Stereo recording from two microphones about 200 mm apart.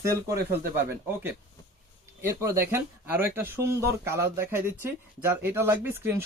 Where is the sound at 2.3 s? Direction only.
15° right (ahead or behind).